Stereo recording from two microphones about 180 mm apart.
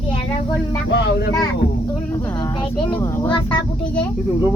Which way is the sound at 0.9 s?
70° left (ahead or behind).